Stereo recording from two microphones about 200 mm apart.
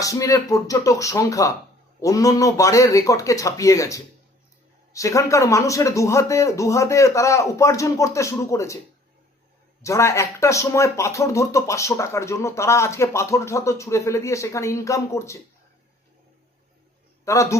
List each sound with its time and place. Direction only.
0.0 s speech: 15° left (ahead or behind)
9.8 s speech: 15° left (ahead or behind)
17.2 s speech: 15° left (ahead or behind)